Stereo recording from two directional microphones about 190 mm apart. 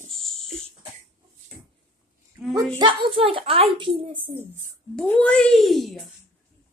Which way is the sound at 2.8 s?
25° right (ahead or behind).